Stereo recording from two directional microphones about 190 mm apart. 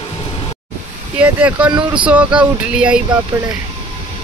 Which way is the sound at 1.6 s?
25° right (ahead or behind).